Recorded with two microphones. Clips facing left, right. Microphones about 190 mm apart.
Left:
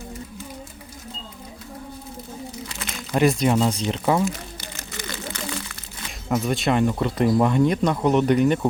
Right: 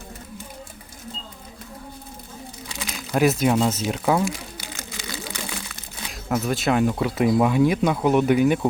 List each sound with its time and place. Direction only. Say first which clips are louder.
2.8 s speech: even; 5° right (ahead or behind)
4.9 s a sound: left 2 dB; 10° right (ahead or behind)
6.1 s speech: left 1 dB; centre (ahead or behind)